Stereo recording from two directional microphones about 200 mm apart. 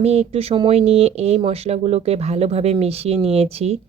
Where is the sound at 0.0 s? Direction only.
30° right (ahead or behind).